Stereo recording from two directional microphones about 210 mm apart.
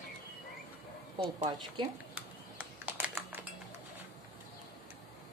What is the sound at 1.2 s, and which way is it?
Speech, 20° right (ahead or behind).